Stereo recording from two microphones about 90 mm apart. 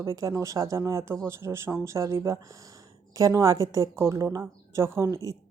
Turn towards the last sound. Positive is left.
turn(degrees=-35)  # may be behind; listen again after turning